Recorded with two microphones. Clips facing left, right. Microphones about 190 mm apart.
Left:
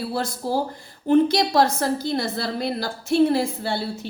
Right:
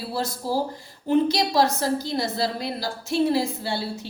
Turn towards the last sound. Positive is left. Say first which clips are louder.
# left 2 dB
turn(degrees=55)  # may be behind; listen again after turning